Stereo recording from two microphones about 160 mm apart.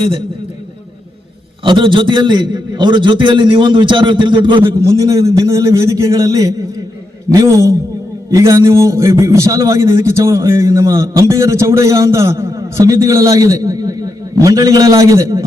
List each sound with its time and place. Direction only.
1.6 s a man's voice: 30° right (ahead or behind)
4.6 s a man's voice: 20° right (ahead or behind)